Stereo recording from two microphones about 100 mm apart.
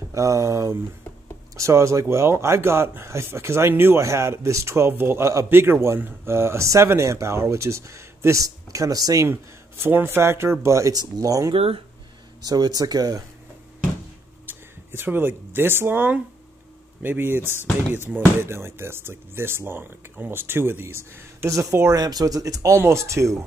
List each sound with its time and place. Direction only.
0.1 s speech: 35° right (ahead or behind)
9.3 s speech: 20° right (ahead or behind)
11.5 s speech: 70° right (ahead or behind)
12.4 s speech: 40° right (ahead or behind)
14.4 s speech: 20° right (ahead or behind)
21.9 s speech: 40° right (ahead or behind)